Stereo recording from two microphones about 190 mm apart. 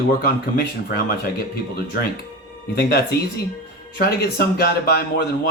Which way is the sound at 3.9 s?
50° left (ahead or behind).